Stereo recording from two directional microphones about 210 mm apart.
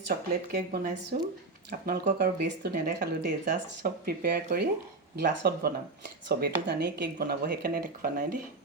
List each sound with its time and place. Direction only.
0.1 s speech: 45° right (ahead or behind)
1.9 s speech: 50° right (ahead or behind)